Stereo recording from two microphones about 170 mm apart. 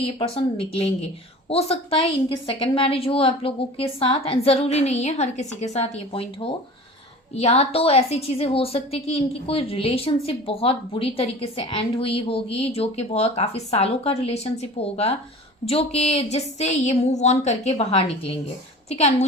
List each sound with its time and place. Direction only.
0.2 s a woman's voice: 35° left (ahead or behind)